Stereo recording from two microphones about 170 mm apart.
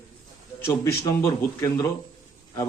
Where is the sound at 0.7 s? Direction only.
15° left (ahead or behind).